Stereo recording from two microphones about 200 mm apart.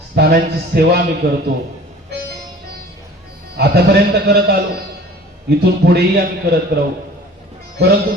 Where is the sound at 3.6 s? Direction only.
50° right (ahead or behind).